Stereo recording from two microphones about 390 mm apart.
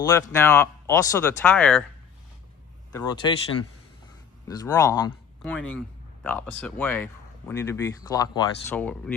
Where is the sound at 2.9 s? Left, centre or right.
Centre.